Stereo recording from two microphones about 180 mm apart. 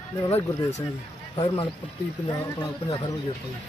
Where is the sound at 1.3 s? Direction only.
25° left (ahead or behind).